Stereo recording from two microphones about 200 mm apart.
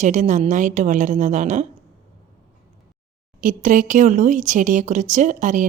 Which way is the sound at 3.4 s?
40° right (ahead or behind).